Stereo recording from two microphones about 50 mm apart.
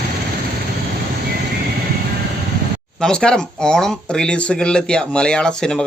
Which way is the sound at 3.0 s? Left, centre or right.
Centre.